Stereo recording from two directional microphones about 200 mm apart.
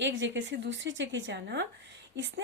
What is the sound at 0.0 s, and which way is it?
A woman's voice, 65° right (ahead or behind).